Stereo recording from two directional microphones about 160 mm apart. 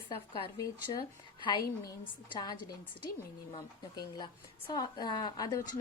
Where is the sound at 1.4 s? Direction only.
30° left (ahead or behind).